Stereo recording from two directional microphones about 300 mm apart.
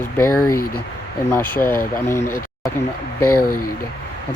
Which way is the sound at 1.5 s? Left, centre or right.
Centre.